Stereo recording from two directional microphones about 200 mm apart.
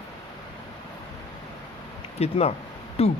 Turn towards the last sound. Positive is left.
turn(degrees=30)  # may be behind; listen again after turning